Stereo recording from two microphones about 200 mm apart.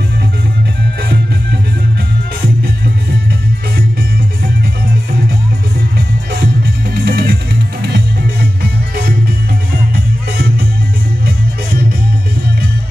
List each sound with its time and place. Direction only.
6.9 s music: 50° right (ahead or behind)